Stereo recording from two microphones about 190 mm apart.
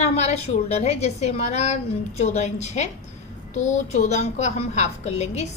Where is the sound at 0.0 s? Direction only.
35° left (ahead or behind).